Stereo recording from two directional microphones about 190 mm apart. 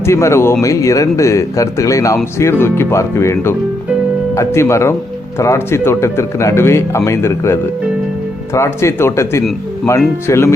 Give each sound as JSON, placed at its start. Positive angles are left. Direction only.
{"t": 0.0, "sound": "speech", "side_deg": 15}